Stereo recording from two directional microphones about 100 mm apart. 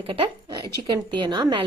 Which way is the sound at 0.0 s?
60° right (ahead or behind).